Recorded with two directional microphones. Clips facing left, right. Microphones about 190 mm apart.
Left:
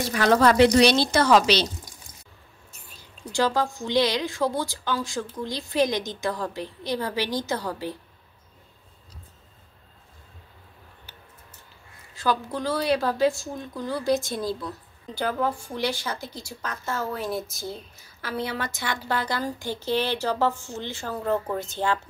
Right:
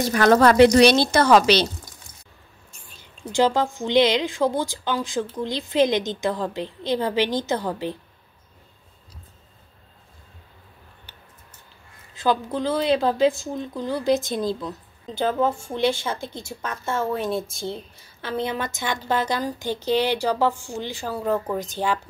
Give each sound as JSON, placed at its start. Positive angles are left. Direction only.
{"t": 0.0, "sound": "a woman's voice", "side_deg": -45}
{"t": 3.0, "sound": "a sound", "side_deg": -20}
{"t": 3.8, "sound": "speech", "side_deg": -20}
{"t": 12.2, "sound": "a woman's voice", "side_deg": -20}